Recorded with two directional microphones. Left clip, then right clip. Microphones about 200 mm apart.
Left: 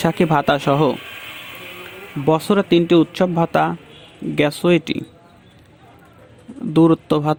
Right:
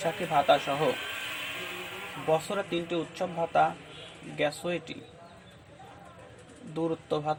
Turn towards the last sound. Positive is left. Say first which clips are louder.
# left 13 dB
turn(degrees=55)  # may be behind; listen again after turning